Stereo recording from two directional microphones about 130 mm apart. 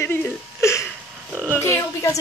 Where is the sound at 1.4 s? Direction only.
15° left (ahead or behind).